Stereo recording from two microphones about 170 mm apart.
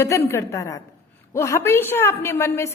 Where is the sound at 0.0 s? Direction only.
15° left (ahead or behind).